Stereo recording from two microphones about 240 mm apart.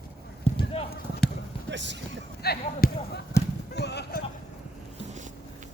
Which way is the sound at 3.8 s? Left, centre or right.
Left.